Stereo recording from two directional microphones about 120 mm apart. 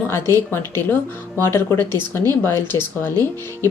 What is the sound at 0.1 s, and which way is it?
Speech, 20° left (ahead or behind).